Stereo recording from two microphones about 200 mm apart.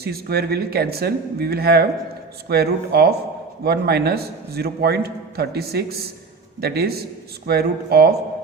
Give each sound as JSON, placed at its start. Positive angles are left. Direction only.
{"t": 0.0, "sound": "a man's voice", "side_deg": -50}